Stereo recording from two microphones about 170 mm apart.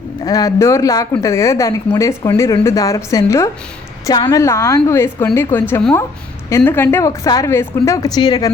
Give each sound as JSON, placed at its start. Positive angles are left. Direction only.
{"t": 0.3, "sound": "a woman's voice", "side_deg": 20}